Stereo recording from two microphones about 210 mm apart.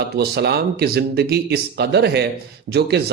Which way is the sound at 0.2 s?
50° right (ahead or behind).